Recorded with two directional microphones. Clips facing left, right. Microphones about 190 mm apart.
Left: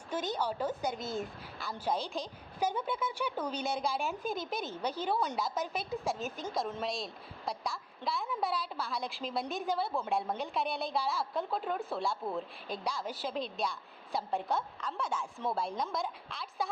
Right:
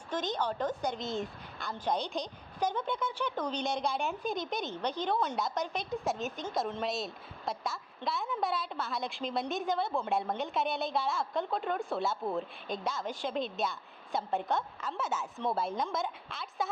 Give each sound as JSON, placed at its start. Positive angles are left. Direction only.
{"t": 0.1, "sound": "a woman's voice", "side_deg": 10}